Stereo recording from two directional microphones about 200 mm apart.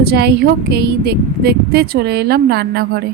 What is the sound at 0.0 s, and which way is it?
A woman's voice, 55° right (ahead or behind).